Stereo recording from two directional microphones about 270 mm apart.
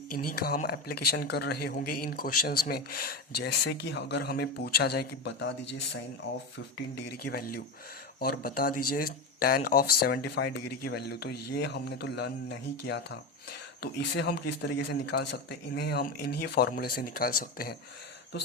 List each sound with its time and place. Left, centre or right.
0.2 s a man's voice: left
6.9 s a man's voice: left